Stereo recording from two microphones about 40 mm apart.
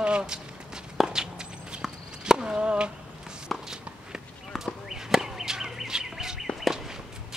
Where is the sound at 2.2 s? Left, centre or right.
Centre.